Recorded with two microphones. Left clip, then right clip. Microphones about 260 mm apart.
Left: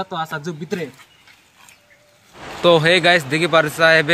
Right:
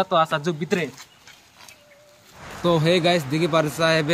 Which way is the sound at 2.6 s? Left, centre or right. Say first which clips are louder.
Left 7 dB; centre.